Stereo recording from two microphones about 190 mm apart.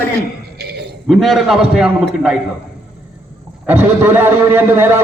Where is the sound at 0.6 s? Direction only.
60° right (ahead or behind).